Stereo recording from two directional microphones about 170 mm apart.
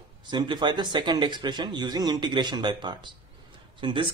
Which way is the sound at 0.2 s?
25° right (ahead or behind).